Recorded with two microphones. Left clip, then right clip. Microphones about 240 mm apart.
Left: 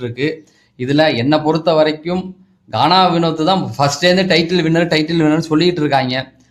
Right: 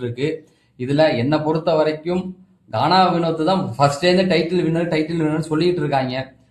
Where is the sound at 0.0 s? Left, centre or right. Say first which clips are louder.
Left 3 dB; left.